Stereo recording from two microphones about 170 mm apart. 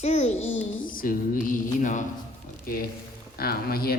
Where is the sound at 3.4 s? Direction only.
65° left (ahead or behind).